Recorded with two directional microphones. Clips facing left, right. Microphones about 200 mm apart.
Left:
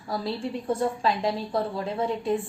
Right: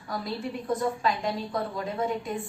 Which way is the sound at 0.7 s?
30° left (ahead or behind).